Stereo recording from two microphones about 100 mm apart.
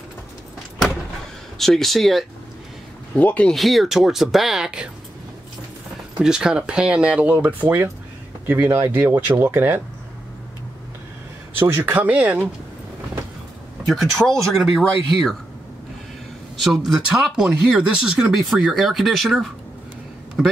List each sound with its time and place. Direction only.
1.6 s speech: 5° left (ahead or behind)
3.2 s speech: 15° left (ahead or behind)
3.5 s speech: centre (ahead or behind)
6.1 s speech: 10° right (ahead or behind)
11.5 s speech: 20° right (ahead or behind)
13.8 s speech: centre (ahead or behind)
16.5 s speech: centre (ahead or behind)